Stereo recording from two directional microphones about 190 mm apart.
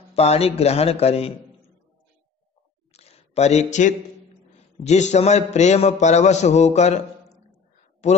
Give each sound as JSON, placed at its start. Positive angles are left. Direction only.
{"t": 0.1, "sound": "a man's voice", "side_deg": 35}
{"t": 2.9, "sound": "a sound", "side_deg": 35}
{"t": 4.8, "sound": "a man's voice", "side_deg": 35}
{"t": 8.0, "sound": "a man's voice", "side_deg": 35}